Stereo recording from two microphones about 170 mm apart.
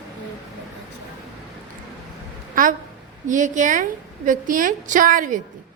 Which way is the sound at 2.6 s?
50° right (ahead or behind).